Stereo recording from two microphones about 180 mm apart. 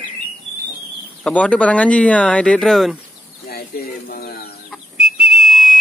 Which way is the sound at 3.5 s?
55° left (ahead or behind).